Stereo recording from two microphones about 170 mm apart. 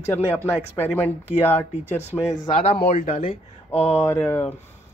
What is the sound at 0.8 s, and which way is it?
Speech, 10° left (ahead or behind).